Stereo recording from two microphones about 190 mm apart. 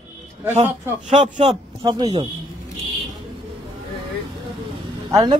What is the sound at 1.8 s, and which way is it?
Speech, 25° right (ahead or behind).